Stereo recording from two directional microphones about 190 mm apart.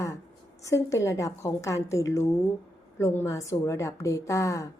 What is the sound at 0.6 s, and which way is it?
A woman's voice, 15° left (ahead or behind).